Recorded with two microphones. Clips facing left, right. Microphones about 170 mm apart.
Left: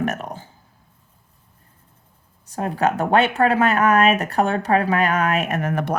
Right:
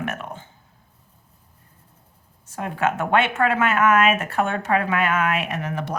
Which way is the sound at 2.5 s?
35° left (ahead or behind).